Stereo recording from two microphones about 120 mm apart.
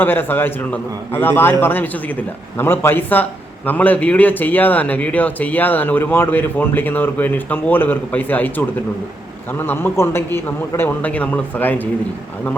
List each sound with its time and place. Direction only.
0.0 s a man's voice: 15° left (ahead or behind)